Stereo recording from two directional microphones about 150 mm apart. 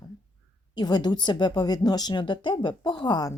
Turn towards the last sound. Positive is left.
turn(degrees=30)  # may be behind; listen again after turning